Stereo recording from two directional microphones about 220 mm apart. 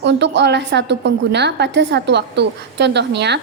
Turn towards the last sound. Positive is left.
turn(degrees=-50)  # may be behind; listen again after turning